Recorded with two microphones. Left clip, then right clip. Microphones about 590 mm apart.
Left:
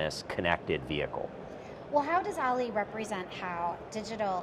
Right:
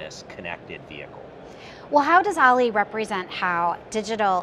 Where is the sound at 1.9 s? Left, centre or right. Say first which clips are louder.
Right 11 dB; right.